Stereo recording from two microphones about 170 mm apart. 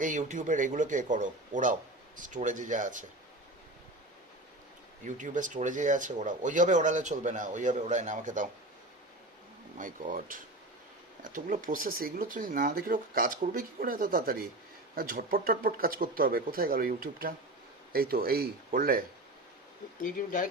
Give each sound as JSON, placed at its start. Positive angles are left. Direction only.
{"t": 0.0, "sound": "speech", "side_deg": -50}
{"t": 5.0, "sound": "speech", "side_deg": -50}
{"t": 9.7, "sound": "speech", "side_deg": -50}
{"t": 20.0, "sound": "speech", "side_deg": 55}